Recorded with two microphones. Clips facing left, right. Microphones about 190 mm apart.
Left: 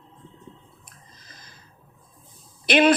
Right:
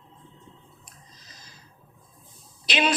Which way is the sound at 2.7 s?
55° left (ahead or behind).